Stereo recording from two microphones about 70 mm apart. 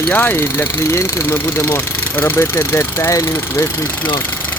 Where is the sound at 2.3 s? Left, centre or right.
Left.